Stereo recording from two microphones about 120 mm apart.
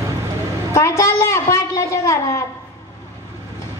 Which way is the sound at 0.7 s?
25° left (ahead or behind).